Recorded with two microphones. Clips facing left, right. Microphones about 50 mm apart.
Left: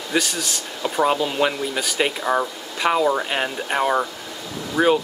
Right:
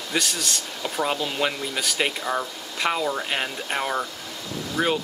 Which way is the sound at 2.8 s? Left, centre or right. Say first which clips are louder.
Left 6 dB; centre.